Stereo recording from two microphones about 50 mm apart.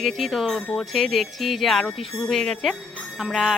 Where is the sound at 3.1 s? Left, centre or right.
Centre.